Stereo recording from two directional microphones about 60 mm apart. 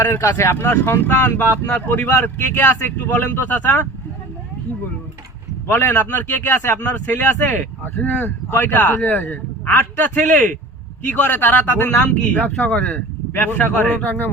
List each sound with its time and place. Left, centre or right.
0.2 s a man's voice: left
5.6 s a man's voice: left